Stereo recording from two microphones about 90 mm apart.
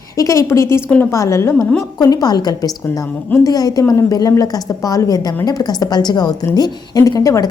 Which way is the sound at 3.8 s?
30° left (ahead or behind).